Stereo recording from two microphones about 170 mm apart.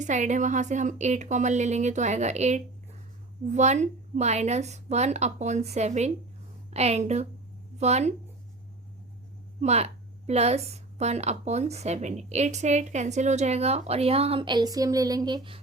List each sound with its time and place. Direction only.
0.0 s a woman's voice: 45° right (ahead or behind)
9.6 s a woman's voice: 40° right (ahead or behind)